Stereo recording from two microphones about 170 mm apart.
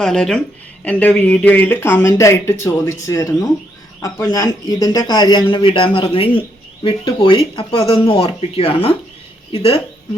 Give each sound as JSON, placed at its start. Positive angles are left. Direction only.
{"t": 0.0, "sound": "speech", "side_deg": 5}